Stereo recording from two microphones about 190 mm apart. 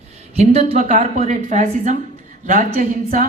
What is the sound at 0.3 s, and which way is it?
Speech, 35° right (ahead or behind).